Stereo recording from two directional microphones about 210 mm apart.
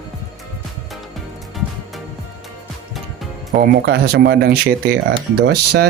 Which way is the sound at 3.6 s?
50° right (ahead or behind).